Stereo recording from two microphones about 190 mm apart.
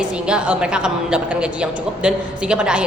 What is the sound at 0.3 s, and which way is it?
A woman's voice, 5° right (ahead or behind).